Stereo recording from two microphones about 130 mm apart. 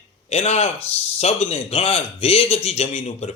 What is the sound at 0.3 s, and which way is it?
A man's voice, 55° left (ahead or behind).